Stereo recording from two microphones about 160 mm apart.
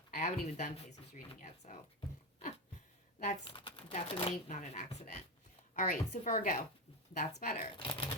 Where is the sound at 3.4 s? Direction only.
30° left (ahead or behind); by 6.4 s 50° left (ahead or behind).